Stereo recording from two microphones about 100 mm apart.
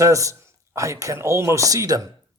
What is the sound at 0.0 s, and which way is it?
Speech, 30° right (ahead or behind).